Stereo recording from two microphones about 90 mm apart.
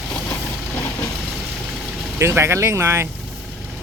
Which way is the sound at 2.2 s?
30° right (ahead or behind).